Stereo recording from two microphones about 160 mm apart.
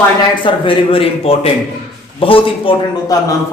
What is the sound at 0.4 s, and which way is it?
A man's voice, 35° left (ahead or behind).